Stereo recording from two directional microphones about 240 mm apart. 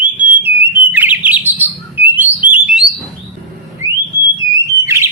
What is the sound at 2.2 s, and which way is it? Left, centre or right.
Alarm, centre.